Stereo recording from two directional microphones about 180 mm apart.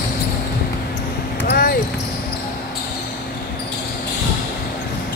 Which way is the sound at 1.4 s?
55° left (ahead or behind).